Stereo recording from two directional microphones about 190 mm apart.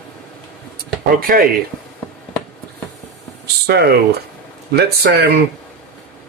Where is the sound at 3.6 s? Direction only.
55° right (ahead or behind).